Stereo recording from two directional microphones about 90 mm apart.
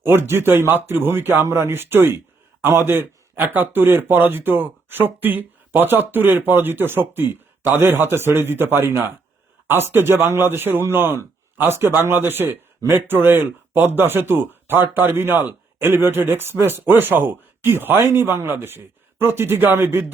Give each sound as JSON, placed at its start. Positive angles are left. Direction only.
{"t": 0.0, "sound": "speech", "side_deg": -25}